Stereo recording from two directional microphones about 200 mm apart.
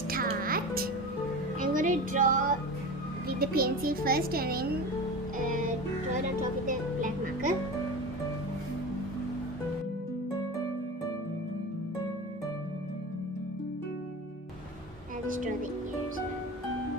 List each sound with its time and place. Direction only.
0.1 s music: 45° right (ahead or behind)
3.2 s speech: 50° right (ahead or behind)
6.7 s music: 40° right (ahead or behind)